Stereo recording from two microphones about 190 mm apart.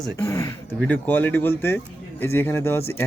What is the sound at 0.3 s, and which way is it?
Speech, 15° left (ahead or behind).